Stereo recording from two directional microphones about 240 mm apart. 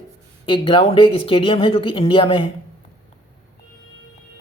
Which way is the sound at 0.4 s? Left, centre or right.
Left.